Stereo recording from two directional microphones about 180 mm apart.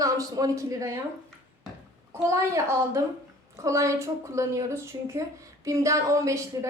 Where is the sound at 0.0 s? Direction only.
20° right (ahead or behind).